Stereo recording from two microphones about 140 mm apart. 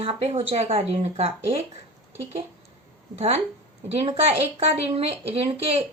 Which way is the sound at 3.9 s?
45° right (ahead or behind).